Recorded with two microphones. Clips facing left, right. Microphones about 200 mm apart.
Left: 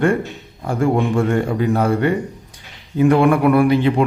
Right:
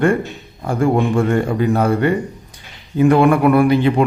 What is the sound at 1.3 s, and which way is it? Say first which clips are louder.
A man's voice: right 1 dB; 50° right (ahead or behind).